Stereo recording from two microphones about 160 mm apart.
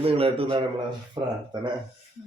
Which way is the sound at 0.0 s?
35° right (ahead or behind).